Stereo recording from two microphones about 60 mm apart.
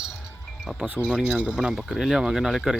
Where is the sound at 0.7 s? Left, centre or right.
Centre.